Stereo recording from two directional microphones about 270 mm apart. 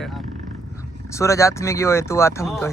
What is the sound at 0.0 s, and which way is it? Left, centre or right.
Vehicle, centre.